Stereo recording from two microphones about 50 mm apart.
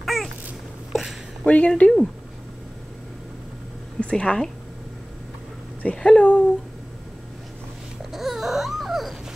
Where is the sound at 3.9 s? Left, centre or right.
Left.